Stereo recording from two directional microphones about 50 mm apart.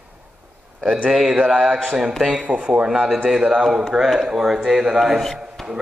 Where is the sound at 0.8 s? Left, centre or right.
Right.